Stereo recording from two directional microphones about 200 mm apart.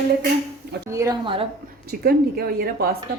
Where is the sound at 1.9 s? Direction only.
50° right (ahead or behind).